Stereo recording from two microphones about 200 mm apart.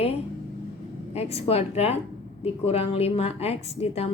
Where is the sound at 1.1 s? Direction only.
30° left (ahead or behind).